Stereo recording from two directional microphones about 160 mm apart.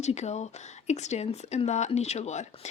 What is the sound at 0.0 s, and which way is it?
A woman's voice, 45° left (ahead or behind).